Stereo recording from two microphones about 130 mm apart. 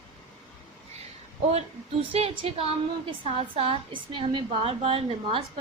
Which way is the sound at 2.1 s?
50° right (ahead or behind).